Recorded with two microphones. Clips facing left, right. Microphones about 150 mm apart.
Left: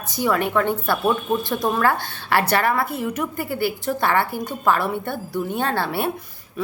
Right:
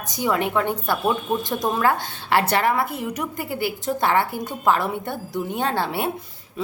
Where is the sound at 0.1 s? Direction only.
20° right (ahead or behind).